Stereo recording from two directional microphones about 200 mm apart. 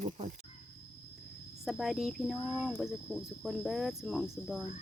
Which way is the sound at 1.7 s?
Centre (ahead or behind).